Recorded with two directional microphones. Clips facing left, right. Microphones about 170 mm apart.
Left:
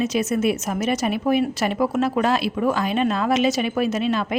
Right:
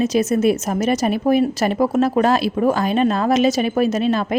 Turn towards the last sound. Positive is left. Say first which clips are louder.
# right 4 dB
turn(degrees=-40)  # may be behind; listen again after turning